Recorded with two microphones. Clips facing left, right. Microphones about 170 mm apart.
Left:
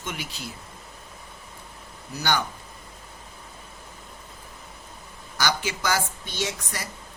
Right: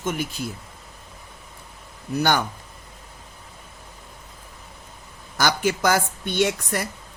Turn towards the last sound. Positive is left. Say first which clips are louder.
# right 9 dB
turn(degrees=-60)  # may be behind; listen again after turning